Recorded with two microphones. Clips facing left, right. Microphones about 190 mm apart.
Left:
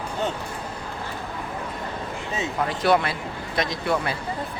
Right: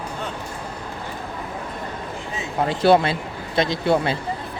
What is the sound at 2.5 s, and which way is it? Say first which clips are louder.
Speech: right 5 dB; 30° right (ahead or behind).